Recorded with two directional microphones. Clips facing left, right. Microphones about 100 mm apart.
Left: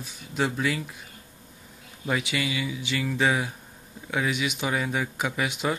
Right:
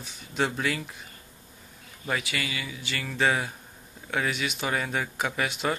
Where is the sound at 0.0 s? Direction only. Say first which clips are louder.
Left 1 dB; 5° left (ahead or behind).